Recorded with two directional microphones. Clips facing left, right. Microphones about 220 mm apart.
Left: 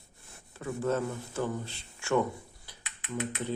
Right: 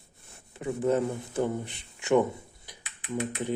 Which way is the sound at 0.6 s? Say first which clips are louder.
Right 4 dB; 20° right (ahead or behind).